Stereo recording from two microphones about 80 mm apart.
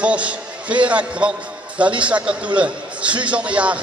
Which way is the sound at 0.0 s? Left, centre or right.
Centre.